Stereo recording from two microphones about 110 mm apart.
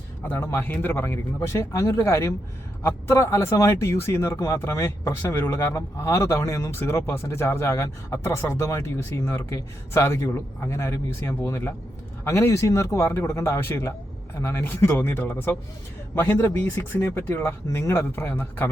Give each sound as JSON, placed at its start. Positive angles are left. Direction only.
{"t": 0.3, "sound": "speech", "side_deg": 20}